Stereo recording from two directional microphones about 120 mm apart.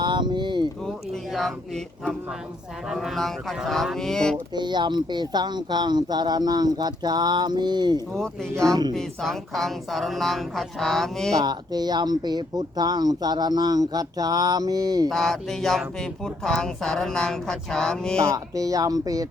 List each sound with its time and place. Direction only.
0.0 s a sound: 40° right (ahead or behind)
0.9 s speech: 5° left (ahead or behind)
4.5 s speech: 40° right (ahead or behind)
8.1 s speech: 5° left (ahead or behind)
8.5 s speech: 30° right (ahead or behind)
9.0 s speech: centre (ahead or behind)
11.3 s speech: 35° right (ahead or behind)
15.1 s speech: centre (ahead or behind)
18.2 s speech: 25° right (ahead or behind)